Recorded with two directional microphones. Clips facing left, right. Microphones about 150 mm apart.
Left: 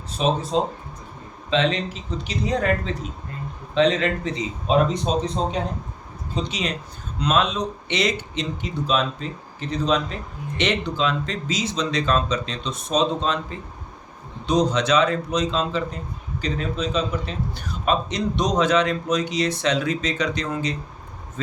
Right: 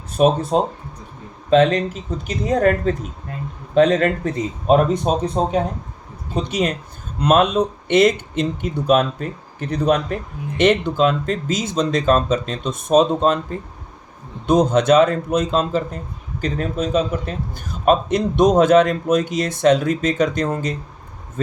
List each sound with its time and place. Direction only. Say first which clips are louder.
0.1 s a man's voice: right 6 dB; 55° right (ahead or behind)